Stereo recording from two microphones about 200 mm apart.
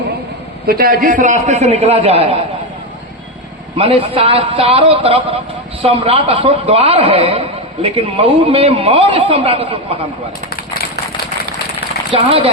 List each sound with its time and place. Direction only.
0.7 s a man's voice: 50° right (ahead or behind); by 2.4 s 30° right (ahead or behind)
3.8 s a man's voice: 30° right (ahead or behind)
12.1 s a man's voice: 30° right (ahead or behind)